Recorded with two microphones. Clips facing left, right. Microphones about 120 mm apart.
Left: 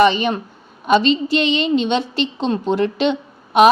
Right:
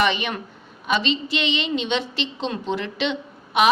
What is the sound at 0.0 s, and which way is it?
A woman's voice, 35° left (ahead or behind).